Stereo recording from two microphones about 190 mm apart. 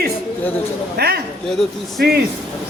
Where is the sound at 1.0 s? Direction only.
55° right (ahead or behind).